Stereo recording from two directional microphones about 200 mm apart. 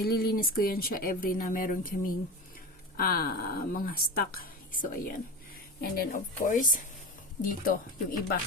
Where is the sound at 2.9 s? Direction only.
45° left (ahead or behind).